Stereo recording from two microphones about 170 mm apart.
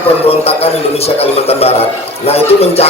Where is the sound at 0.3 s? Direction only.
35° left (ahead or behind).